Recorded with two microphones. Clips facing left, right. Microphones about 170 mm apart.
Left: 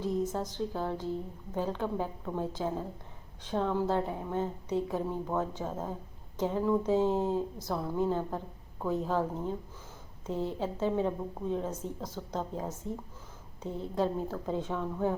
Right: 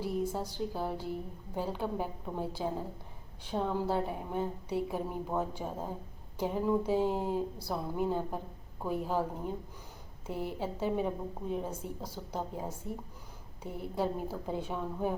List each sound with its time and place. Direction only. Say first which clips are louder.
0.0 s a woman's voice: left 2 dB; 10° right (ahead or behind)
4.4 s a woman's voice: left 2 dB; 20° left (ahead or behind)
4.9 s a woman's voice: left 2 dB; 15° right (ahead or behind)
7.1 s a woman's voice: left 4 dB; 20° left (ahead or behind)
7.3 s a woman's voice: left 1 dB; 15° right (ahead or behind)
10.6 s a woman's voice: left 2 dB; 15° right (ahead or behind)
13.7 s a woman's voice: left 3 dB; 25° left (ahead or behind)
13.9 s a woman's voice: left 2 dB; 10° right (ahead or behind)